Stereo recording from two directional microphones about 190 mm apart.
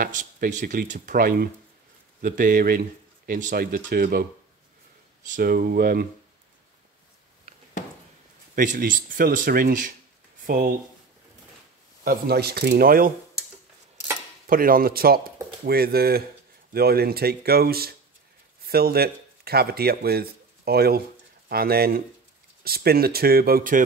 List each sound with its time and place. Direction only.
0.0 s speech: 45° right (ahead or behind)
5.3 s speech: 50° right (ahead or behind)
8.5 s speech: 45° right (ahead or behind)
12.0 s speech: 50° right (ahead or behind)
14.5 s speech: 50° right (ahead or behind)